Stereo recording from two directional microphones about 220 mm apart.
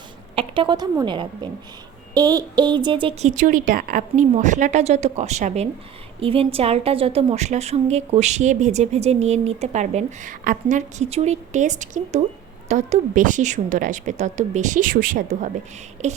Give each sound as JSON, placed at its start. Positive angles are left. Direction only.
{"t": 0.3, "sound": "a woman's voice", "side_deg": -25}